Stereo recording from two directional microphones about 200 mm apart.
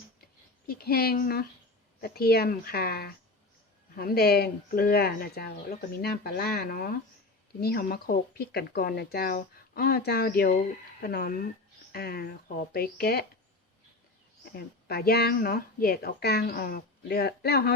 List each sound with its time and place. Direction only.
0.7 s speech: 50° left (ahead or behind)
14.5 s speech: 50° left (ahead or behind)